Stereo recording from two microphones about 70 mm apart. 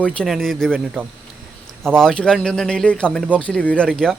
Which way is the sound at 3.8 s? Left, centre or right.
Centre.